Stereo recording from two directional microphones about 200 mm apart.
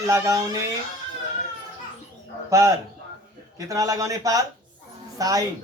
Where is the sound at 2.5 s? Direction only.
15° right (ahead or behind).